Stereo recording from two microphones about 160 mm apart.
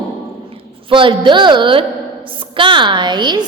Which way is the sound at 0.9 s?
30° right (ahead or behind).